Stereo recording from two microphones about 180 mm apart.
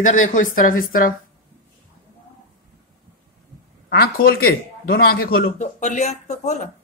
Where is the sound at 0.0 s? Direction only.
45° left (ahead or behind).